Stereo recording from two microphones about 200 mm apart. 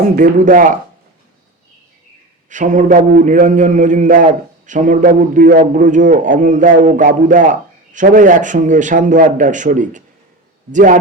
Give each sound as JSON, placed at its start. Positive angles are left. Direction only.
{"t": 0.2, "sound": "a man's voice", "side_deg": -40}
{"t": 2.5, "sound": "a man's voice", "side_deg": -40}